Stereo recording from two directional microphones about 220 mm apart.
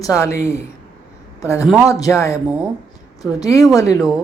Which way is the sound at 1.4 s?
15° left (ahead or behind).